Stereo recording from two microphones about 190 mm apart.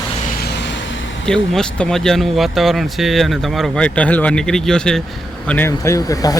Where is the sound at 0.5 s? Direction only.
70° left (ahead or behind).